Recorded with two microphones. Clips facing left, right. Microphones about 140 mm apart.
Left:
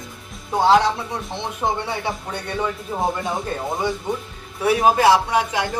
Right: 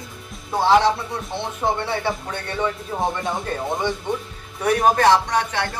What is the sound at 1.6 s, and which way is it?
Speech, 15° left (ahead or behind).